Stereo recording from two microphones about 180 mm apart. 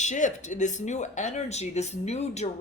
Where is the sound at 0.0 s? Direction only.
40° left (ahead or behind).